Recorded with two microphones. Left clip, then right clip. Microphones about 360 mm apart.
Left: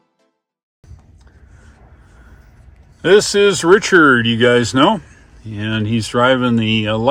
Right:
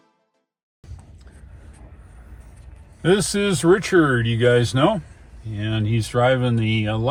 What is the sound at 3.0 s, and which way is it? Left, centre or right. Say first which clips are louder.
Speech: left 9 dB; left.